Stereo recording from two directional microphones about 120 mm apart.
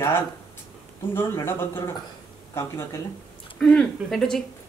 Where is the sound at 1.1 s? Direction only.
20° left (ahead or behind).